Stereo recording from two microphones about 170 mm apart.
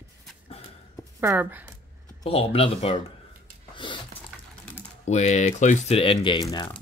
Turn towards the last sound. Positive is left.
turn(degrees=25)  # may be behind; listen again after turning